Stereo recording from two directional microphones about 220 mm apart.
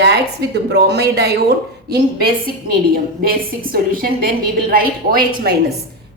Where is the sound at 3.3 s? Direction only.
40° right (ahead or behind).